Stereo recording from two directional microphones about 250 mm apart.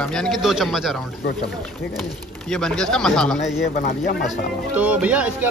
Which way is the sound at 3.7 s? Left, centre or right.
Left.